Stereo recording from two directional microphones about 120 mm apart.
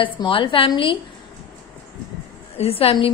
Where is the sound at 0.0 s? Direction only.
45° left (ahead or behind).